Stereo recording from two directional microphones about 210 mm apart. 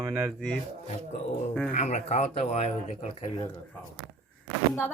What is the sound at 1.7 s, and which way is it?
Speech, 35° left (ahead or behind).